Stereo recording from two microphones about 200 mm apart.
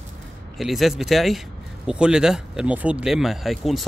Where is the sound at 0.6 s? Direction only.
Centre (ahead or behind).